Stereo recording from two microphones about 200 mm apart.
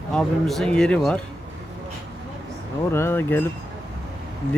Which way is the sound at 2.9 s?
10° left (ahead or behind).